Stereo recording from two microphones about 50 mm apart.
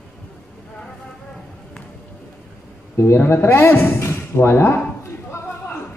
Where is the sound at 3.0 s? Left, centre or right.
Left.